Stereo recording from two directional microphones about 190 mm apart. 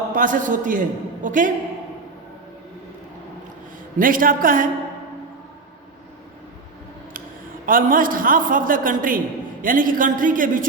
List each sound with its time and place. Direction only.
0.1 s a man's voice: 45° right (ahead or behind)
3.9 s a man's voice: 45° right (ahead or behind)
7.7 s a man's voice: 45° right (ahead or behind)